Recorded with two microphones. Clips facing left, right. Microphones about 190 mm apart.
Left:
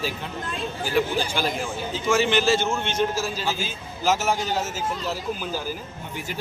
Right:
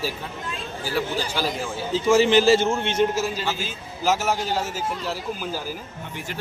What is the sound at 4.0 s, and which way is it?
Speech, 10° right (ahead or behind).